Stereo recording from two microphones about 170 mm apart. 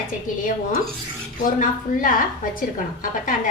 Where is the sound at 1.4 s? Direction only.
50° left (ahead or behind).